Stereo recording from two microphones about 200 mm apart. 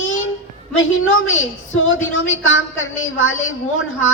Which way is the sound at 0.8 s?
80° left.